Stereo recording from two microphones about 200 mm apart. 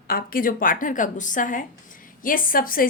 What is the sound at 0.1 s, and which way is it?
A woman's voice, 45° left (ahead or behind).